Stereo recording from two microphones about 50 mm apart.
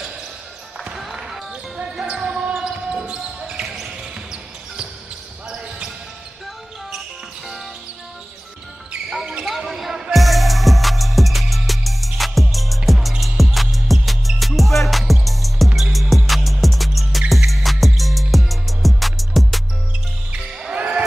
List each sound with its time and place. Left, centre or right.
0.9 s basketball bounce: centre
3.6 s basketball bounce: centre
3.9 s basketball bounce: centre
9.2 s basketball bounce: centre
9.5 s basketball bounce: centre
10.1 s music: centre
20.7 s basketball bounce: centre